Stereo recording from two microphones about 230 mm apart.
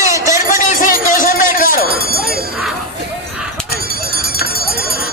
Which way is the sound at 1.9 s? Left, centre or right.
Right.